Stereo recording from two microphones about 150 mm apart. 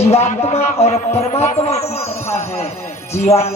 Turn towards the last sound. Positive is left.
turn(degrees=45)  # may be behind; listen again after turning